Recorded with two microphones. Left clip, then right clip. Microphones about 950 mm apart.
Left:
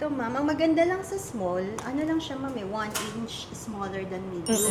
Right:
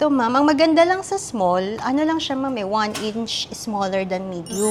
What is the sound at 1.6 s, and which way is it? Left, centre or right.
Speech, right.